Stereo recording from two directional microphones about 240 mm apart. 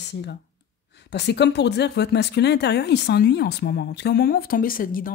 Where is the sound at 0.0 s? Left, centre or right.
Left.